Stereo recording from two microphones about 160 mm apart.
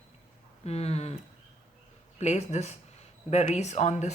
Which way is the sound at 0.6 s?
40° left (ahead or behind).